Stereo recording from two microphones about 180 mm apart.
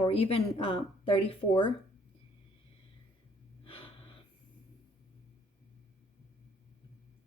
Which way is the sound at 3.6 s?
30° left (ahead or behind).